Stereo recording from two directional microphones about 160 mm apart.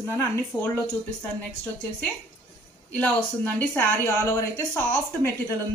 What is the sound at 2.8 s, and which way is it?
Speech, 10° left (ahead or behind).